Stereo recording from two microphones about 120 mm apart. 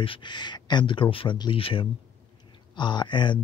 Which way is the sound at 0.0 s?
45° left (ahead or behind).